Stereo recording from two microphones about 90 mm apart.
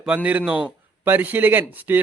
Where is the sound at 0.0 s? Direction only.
15° right (ahead or behind).